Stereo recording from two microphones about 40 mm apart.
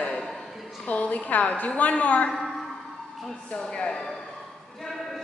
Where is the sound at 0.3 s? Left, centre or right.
Centre.